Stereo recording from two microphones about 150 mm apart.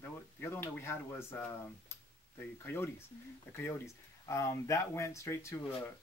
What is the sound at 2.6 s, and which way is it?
Speech, 15° left (ahead or behind).